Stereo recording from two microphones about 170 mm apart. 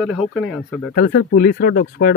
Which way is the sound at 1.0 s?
85° left.